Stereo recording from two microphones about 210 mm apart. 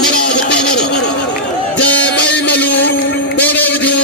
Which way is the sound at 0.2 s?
50° left (ahead or behind).